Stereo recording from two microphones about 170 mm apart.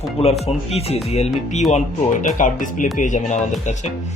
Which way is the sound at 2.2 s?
50° left (ahead or behind).